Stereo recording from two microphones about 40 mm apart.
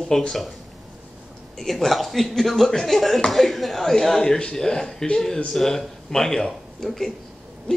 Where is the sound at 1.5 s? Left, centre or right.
Centre.